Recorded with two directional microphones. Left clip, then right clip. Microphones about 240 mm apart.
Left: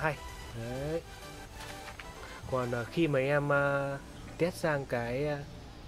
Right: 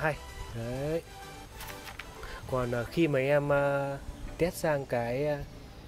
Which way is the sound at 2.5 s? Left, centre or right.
Centre.